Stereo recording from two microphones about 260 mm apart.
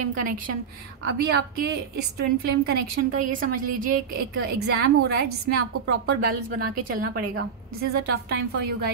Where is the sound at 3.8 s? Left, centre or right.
Right.